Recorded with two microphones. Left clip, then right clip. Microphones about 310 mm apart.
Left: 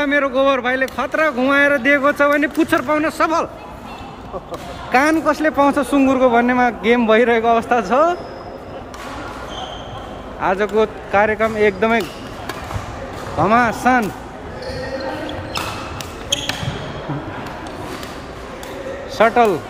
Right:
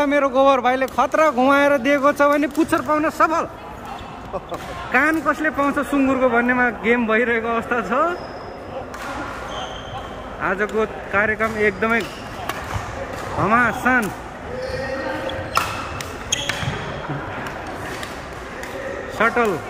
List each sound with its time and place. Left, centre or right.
0.0 s speech: centre
4.9 s speech: centre
10.4 s speech: centre
13.4 s speech: centre
19.1 s a man's voice: centre